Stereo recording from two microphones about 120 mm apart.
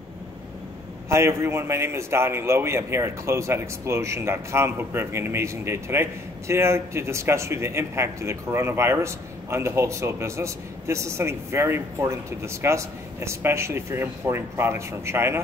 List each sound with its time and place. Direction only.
1.0 s a man's voice: 20° right (ahead or behind)